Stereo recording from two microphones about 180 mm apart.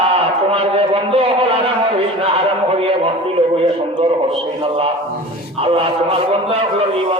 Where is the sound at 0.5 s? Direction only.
30° right (ahead or behind).